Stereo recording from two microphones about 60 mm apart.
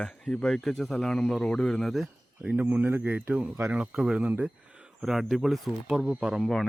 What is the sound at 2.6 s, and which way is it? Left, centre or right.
Speech, right.